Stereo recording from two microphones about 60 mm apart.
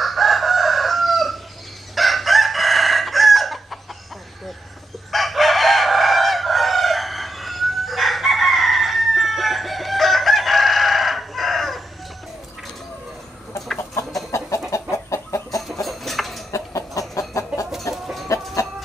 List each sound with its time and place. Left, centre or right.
0.0 s chicken: centre
5.1 s chicken: centre
13.9 s chicken: left
15.7 s chicken: centre
16.5 s chicken: left
17.9 s chicken: centre